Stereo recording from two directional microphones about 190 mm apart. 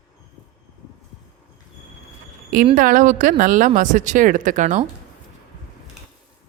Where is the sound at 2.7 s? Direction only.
45° right (ahead or behind).